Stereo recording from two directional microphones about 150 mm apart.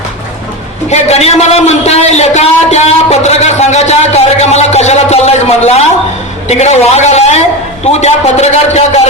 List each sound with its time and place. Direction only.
0.9 s a man's voice: 45° left (ahead or behind)